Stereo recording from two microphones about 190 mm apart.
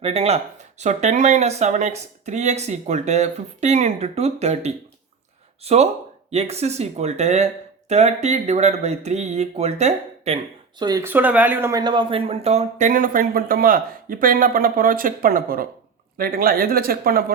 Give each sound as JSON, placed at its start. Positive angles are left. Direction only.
{"t": 0.0, "sound": "speech", "side_deg": -35}
{"t": 10.8, "sound": "speech", "side_deg": -20}